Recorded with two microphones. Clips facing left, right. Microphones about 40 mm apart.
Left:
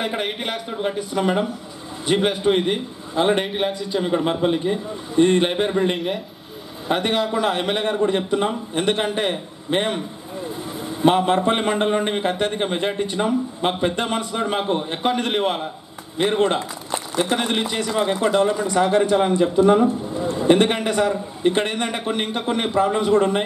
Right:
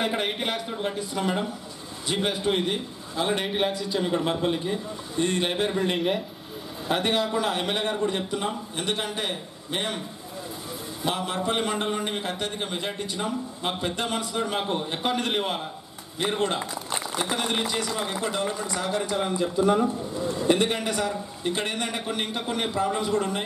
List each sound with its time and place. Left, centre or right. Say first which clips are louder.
0.0 s a man's voice: left 2 dB; centre; by 3.4 s left
3.4 s a man's voice: left 2 dB; centre
5.2 s a man's voice: left 9 dB; left
5.5 s a man's voice: left 5 dB; centre
5.9 s speech: even; centre
6.9 s a man's voice: left 4 dB; centre
18.2 s a man's voice: left 9 dB; left
20.8 s a man's voice: left 7 dB; centre
21.6 s a man's voice: left 5 dB; centre